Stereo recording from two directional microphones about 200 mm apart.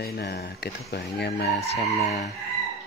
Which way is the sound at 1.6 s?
30° left (ahead or behind).